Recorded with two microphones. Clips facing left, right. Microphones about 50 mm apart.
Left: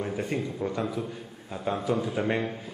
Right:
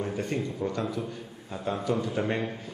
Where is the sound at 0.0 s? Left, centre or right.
Centre.